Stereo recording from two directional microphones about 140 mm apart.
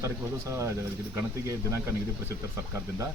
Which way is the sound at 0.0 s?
20° right (ahead or behind).